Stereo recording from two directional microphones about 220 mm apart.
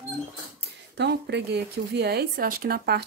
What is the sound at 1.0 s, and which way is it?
Speech, 50° right (ahead or behind).